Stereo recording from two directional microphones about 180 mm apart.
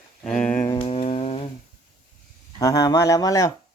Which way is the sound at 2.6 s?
20° left (ahead or behind).